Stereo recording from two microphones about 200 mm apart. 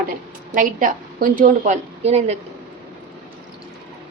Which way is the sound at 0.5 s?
40° right (ahead or behind).